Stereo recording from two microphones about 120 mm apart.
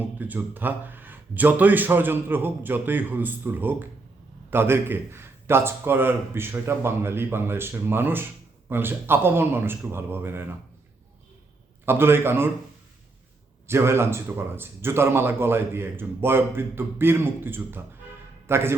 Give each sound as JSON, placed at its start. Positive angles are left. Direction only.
{"t": 0.2, "sound": "a man's voice", "side_deg": -15}
{"t": 11.9, "sound": "a man's voice", "side_deg": -20}
{"t": 13.7, "sound": "a man's voice", "side_deg": -20}